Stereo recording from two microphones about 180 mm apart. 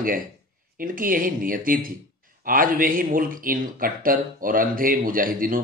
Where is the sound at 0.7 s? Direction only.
50° right (ahead or behind).